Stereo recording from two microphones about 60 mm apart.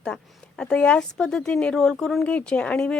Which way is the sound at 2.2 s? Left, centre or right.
Left.